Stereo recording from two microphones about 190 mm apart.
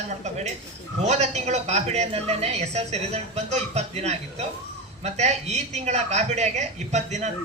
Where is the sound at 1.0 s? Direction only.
35° right (ahead or behind).